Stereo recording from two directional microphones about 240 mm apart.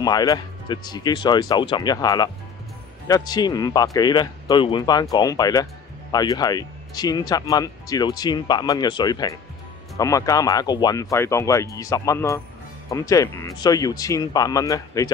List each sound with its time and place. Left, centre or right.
0.0 s speech: centre